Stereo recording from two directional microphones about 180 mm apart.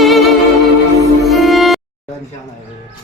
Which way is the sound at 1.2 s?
Centre (ahead or behind).